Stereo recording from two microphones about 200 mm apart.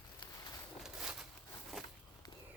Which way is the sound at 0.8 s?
5° right (ahead or behind).